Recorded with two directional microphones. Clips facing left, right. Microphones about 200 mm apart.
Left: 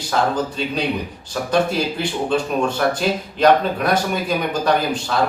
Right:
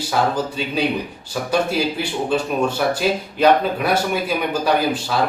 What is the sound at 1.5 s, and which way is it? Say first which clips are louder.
Speech: left 1 dB; 10° right (ahead or behind).